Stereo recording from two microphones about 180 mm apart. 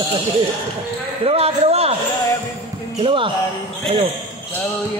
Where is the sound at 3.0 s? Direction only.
30° right (ahead or behind).